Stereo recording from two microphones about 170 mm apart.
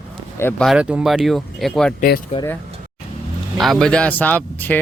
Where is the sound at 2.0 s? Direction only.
60° left (ahead or behind).